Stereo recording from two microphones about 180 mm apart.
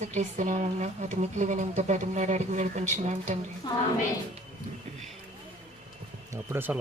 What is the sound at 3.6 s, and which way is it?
Speech, 25° left (ahead or behind).